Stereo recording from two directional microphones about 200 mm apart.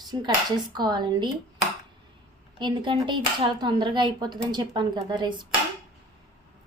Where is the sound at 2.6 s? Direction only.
25° right (ahead or behind).